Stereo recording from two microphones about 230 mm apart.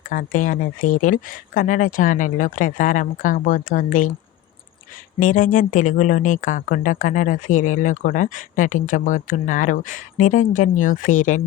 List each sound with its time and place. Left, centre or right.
0.1 s speech: left
5.2 s speech: left